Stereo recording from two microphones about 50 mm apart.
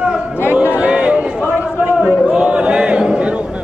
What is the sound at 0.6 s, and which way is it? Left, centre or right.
Chatter, right.